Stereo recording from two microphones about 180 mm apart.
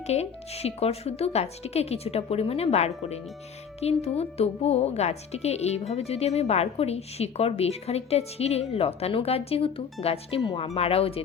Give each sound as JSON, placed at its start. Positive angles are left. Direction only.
{"t": 0.1, "sound": "speech", "side_deg": 35}